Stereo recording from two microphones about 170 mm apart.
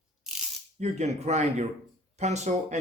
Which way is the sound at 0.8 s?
40° right (ahead or behind).